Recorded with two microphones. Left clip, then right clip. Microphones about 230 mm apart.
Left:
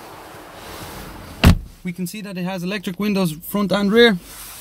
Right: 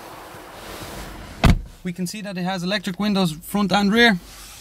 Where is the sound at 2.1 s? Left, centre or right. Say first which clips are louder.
Right 2 dB; centre.